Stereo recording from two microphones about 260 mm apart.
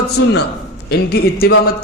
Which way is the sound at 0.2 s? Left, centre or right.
Left.